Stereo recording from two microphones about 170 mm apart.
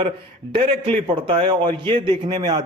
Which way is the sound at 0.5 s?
30° right (ahead or behind).